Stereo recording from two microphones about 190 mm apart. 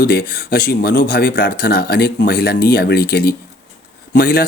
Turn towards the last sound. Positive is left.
turn(degrees=55)  # may be behind; listen again after turning